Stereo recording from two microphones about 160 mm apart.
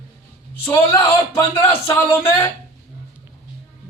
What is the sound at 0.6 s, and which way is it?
Speech, 20° left (ahead or behind).